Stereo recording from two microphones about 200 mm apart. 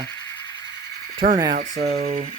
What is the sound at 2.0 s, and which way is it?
Speech, 30° right (ahead or behind).